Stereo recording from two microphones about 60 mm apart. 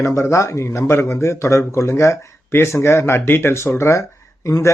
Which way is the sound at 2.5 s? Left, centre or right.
Left.